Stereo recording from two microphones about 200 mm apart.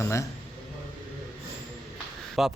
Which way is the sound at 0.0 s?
15° left (ahead or behind).